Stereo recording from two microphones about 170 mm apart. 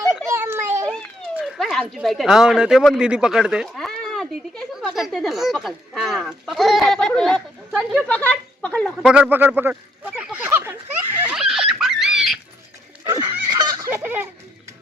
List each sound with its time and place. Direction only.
0.3 s children playing: 15° right (ahead or behind)
0.9 s children playing: 5° left (ahead or behind)
1.4 s speech: centre (ahead or behind)
9.1 s speech: 10° right (ahead or behind)
10.2 s a sound: 5° right (ahead or behind)
11.3 s a sound: centre (ahead or behind)
13.1 s fowl: 10° right (ahead or behind)
13.5 s fowl: 25° right (ahead or behind)
13.9 s a sound: 10° right (ahead or behind)